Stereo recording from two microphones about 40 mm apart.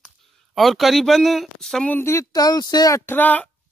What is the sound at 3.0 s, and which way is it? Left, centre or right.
Speech, left.